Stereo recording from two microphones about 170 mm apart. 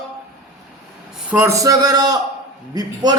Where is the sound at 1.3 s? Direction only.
15° right (ahead or behind).